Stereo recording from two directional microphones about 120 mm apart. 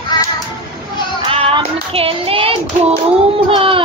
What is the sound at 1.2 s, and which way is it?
Child singing, 50° right (ahead or behind).